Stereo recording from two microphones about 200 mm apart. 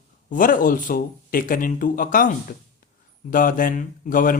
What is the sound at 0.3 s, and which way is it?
Speech, 40° left (ahead or behind).